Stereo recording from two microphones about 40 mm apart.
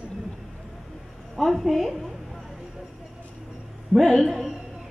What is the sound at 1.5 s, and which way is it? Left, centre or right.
Speech, centre.